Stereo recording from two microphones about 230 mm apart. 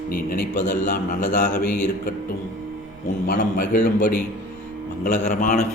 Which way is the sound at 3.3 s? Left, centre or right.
Left.